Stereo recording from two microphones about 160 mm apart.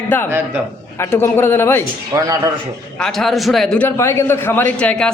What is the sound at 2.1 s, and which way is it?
Speech, 20° right (ahead or behind).